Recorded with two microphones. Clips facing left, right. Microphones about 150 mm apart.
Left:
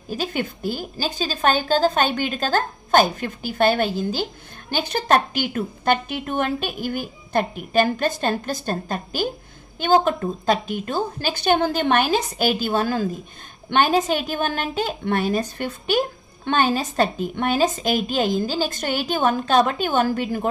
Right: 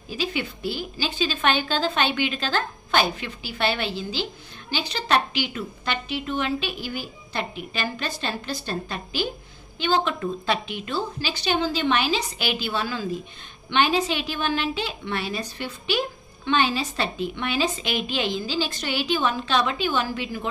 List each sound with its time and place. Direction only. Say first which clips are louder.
0.1 s a woman's voice: left 3 dB; 45° left (ahead or behind)